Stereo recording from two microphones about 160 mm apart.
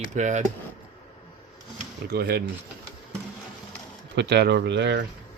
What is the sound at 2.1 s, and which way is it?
Speech, 85° right.